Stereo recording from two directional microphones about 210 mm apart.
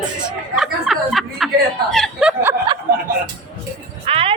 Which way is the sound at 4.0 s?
25° right (ahead or behind).